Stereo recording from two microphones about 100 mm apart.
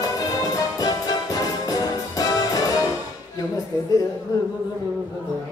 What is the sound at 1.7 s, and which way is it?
Music, 35° left (ahead or behind).